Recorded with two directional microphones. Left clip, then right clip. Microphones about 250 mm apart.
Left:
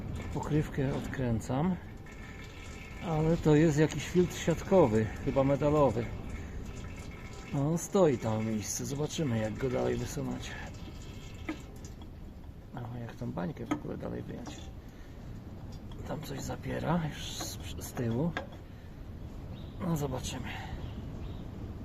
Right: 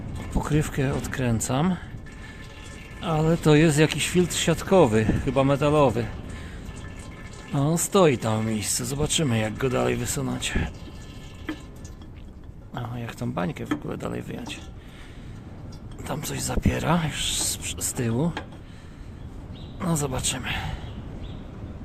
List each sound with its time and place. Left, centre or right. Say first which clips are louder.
0.4 s speech: right 7 dB; centre
3.0 s speech: right 7 dB; centre
7.5 s speech: right 8 dB; centre
12.7 s speech: right 9 dB; right
16.0 s speech: right 9 dB; right
19.8 s a man's voice: right 8 dB; centre